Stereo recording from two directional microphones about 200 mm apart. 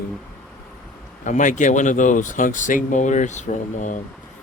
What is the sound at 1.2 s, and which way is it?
Speech, 40° left (ahead or behind).